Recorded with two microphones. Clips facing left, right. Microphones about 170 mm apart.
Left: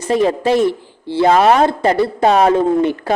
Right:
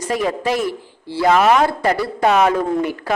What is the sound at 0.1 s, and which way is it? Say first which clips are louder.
A woman's voice: left 6 dB; 30° left (ahead or behind).